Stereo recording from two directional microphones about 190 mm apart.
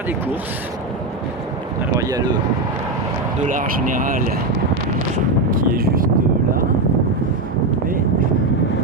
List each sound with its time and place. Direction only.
2.0 s speech: 20° right (ahead or behind)
3.4 s speech: 45° right (ahead or behind)
5.5 s speech: 45° right (ahead or behind)